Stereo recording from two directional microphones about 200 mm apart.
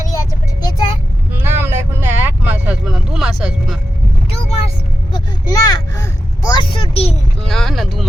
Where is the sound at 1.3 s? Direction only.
10° right (ahead or behind).